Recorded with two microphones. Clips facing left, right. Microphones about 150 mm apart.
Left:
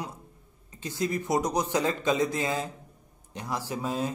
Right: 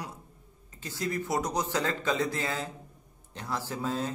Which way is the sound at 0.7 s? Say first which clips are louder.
Left 3 dB; 20° left (ahead or behind).